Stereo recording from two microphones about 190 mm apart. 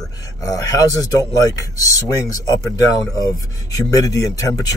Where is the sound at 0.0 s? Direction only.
20° left (ahead or behind).